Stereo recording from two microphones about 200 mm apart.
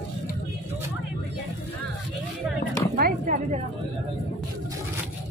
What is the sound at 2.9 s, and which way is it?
Speech, 40° right (ahead or behind).